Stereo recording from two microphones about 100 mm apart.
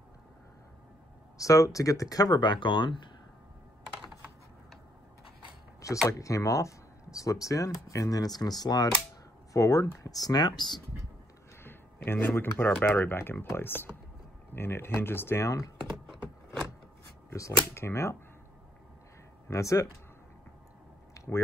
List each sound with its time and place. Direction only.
1.4 s speech: 35° left (ahead or behind); by 3.1 s 50° left (ahead or behind)
5.8 s a sound: 30° left (ahead or behind)
6.1 s speech: 35° left (ahead or behind)
11.6 s a sound: 20° left (ahead or behind)
12.4 s speech: 20° left (ahead or behind)
17.3 s speech: 30° left (ahead or behind)
19.5 s speech: 30° left (ahead or behind)